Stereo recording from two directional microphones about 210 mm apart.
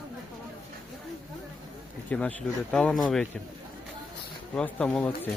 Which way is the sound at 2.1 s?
5° left (ahead or behind).